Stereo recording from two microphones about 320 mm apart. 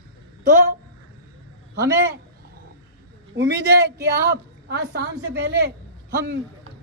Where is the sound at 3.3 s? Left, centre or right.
Right.